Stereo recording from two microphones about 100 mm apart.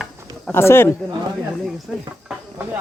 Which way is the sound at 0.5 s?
25° left (ahead or behind).